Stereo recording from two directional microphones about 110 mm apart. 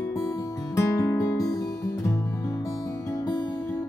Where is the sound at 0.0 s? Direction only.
30° left (ahead or behind).